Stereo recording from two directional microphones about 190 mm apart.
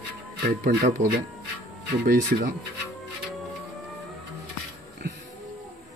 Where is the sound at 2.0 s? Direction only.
50° right (ahead or behind).